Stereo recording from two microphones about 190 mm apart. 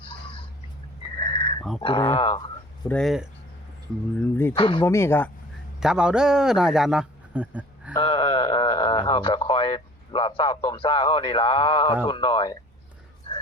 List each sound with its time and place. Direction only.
0.0 s a sound: 30° left (ahead or behind)
1.8 s speech: 25° left (ahead or behind)
2.9 s speech: centre (ahead or behind)
4.2 s speech: 10° left (ahead or behind)
4.5 s speech: 25° left (ahead or behind)
4.9 s speech: 15° left (ahead or behind)
5.8 s speech: 5° right (ahead or behind)
7.9 s a sound: 25° left (ahead or behind)
12.0 s speech: 25° left (ahead or behind)